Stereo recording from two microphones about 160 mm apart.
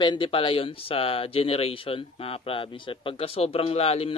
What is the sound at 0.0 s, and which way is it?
Speech, 30° left (ahead or behind).